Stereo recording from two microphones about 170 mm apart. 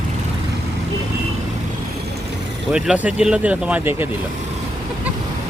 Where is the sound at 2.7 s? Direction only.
5° right (ahead or behind).